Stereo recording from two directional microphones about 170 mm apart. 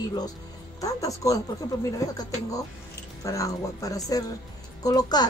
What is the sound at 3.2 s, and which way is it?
A woman's voice, 20° left (ahead or behind).